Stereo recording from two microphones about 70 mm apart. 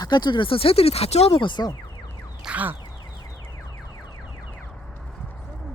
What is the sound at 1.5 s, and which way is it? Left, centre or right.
Speech, left.